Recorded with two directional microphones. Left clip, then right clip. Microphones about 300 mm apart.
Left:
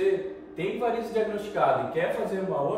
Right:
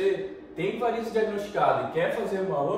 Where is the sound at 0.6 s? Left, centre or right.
Centre.